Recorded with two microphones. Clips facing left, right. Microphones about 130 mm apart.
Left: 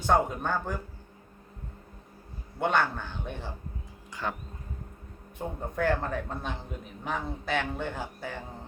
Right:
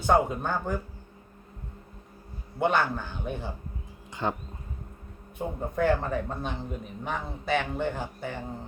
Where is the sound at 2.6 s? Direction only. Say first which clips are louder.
Right 2 dB; 5° right (ahead or behind).